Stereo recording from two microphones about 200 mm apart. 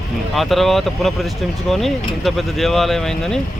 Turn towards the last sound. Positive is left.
turn(degrees=0)  # may be behind; listen again after turning